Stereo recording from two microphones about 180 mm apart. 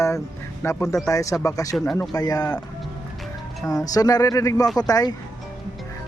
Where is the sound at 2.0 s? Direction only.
20° left (ahead or behind).